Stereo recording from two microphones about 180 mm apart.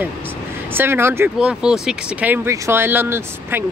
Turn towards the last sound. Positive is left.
turn(degrees=-10)  # may be behind; listen again after turning